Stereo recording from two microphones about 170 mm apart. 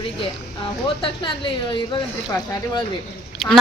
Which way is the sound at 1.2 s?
30° left (ahead or behind).